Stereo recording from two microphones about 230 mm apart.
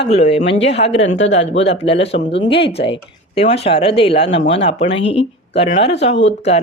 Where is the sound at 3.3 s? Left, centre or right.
Left.